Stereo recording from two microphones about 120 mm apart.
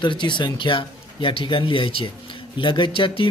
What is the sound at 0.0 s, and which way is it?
Speech, 40° left (ahead or behind).